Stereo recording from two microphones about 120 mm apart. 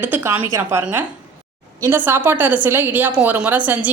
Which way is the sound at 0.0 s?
20° right (ahead or behind).